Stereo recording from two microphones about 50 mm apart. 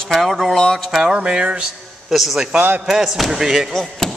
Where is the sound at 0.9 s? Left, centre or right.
Centre.